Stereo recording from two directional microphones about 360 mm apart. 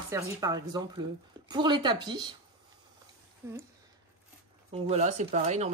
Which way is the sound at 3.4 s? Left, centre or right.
Centre.